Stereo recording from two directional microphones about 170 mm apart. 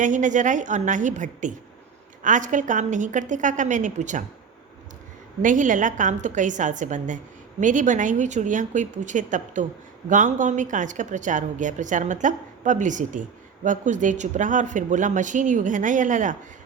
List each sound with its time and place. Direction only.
0.0 s a woman's voice: 45° right (ahead or behind)
5.4 s a woman's voice: 50° right (ahead or behind)